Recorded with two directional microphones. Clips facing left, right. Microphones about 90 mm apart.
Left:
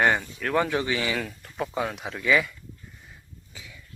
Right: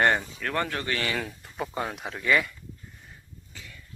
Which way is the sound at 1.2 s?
5° right (ahead or behind).